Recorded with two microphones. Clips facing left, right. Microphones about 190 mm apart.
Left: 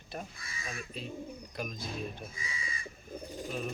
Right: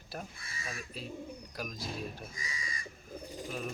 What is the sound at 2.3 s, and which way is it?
Speech, 40° right (ahead or behind).